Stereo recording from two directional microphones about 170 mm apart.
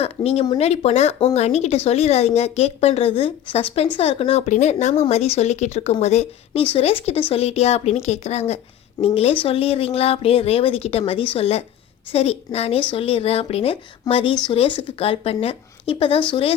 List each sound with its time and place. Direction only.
0.0 s speech: 35° left (ahead or behind)